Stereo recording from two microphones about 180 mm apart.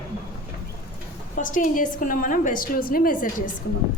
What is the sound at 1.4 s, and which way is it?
A woman's voice, 45° left (ahead or behind).